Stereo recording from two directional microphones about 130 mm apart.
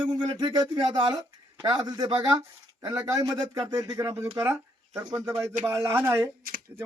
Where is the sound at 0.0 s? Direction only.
35° right (ahead or behind).